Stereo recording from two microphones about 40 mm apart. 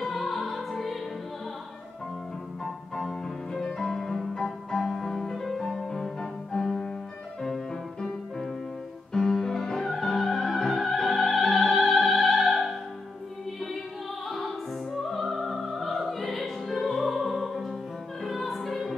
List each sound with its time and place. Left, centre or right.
0.0 s music: centre
2.6 s music: centre
15.0 s music: centre